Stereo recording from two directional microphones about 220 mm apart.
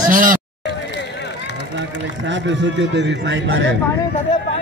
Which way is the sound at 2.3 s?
55° right (ahead or behind).